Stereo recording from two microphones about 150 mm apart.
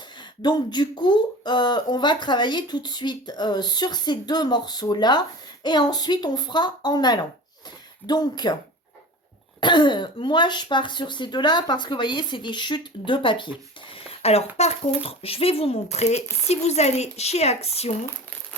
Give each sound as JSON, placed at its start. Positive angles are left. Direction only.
{"t": 0.2, "sound": "speech", "side_deg": 30}
{"t": 9.6, "sound": "speech", "side_deg": 30}